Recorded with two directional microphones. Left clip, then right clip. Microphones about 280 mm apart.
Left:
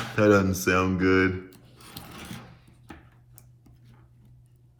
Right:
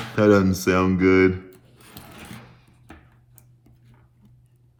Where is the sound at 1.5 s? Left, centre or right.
Centre.